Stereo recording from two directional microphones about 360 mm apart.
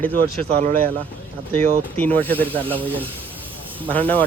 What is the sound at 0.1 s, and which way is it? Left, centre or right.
Speech, right.